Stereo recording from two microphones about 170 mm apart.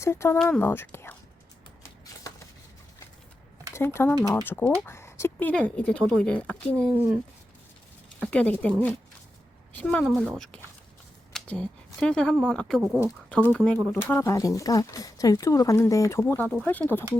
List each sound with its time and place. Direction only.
0.0 s speech: 15° left (ahead or behind)
3.8 s speech: 15° left (ahead or behind)
8.2 s speech: 5° left (ahead or behind)
9.7 s speech: 5° left (ahead or behind)